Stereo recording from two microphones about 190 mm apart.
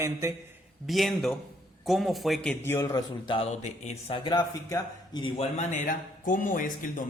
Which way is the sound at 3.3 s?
35° left (ahead or behind).